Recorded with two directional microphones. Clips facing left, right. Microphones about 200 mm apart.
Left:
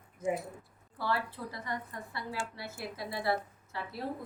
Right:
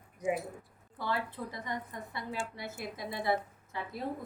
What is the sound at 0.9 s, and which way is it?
A woman's voice, 20° right (ahead or behind).